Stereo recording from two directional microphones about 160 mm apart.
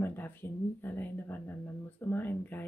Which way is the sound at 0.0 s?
15° left (ahead or behind).